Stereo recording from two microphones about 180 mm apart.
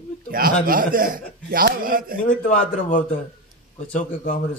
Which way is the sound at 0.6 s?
50° right (ahead or behind).